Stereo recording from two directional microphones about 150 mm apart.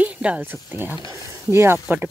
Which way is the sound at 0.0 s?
10° right (ahead or behind).